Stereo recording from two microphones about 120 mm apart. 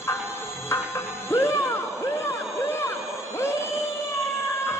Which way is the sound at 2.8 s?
20° left (ahead or behind).